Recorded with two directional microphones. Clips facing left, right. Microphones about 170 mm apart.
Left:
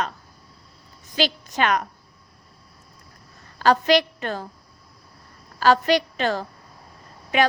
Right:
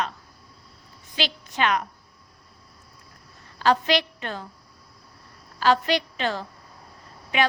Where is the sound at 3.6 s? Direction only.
45° left (ahead or behind).